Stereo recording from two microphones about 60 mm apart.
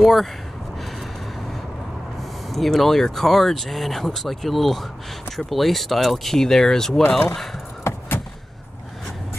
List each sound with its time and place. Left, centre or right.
0.0 s speech: centre
2.5 s speech: centre
7.8 s vehicle: left